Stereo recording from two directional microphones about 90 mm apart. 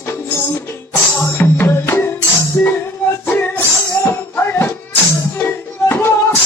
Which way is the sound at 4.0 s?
25° left (ahead or behind).